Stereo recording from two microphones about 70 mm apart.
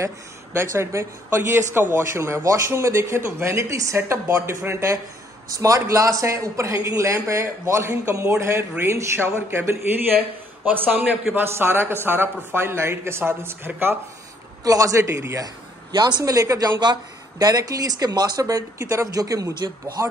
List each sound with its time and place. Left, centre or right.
0.0 s a woman's voice: right
14.6 s a man's voice: right
15.4 s speech: right
16.8 s speech: right
19.0 s speech: right